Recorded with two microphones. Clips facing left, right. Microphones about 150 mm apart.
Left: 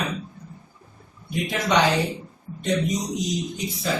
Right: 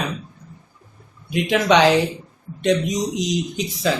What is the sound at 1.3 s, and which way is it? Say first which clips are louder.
Speech: right 6 dB; 90° right.